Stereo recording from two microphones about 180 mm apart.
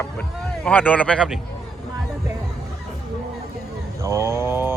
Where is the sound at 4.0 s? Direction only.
15° right (ahead or behind).